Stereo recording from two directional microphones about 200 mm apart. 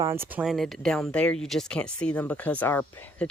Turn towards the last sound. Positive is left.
turn(degrees=10)  # may be behind; listen again after turning